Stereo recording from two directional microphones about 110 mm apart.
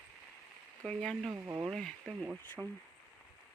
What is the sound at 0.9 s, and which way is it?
Speech, 5° left (ahead or behind).